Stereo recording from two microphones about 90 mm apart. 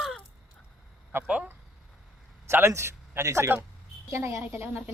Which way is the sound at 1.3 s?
15° right (ahead or behind).